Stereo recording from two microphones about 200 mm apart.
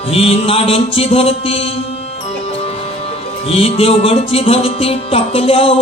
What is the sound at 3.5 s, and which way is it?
Music, 30° left (ahead or behind).